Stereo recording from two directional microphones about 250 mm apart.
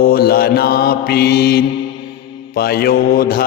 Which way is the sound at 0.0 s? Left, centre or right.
Left.